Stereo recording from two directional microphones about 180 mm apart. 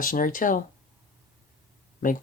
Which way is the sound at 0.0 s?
50° left (ahead or behind).